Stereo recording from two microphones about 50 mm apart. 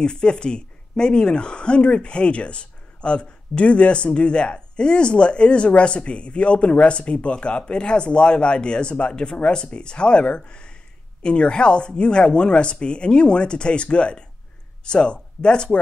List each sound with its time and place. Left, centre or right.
0.0 s speech: centre